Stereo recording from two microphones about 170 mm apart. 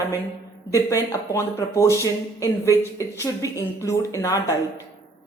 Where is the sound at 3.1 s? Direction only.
15° left (ahead or behind).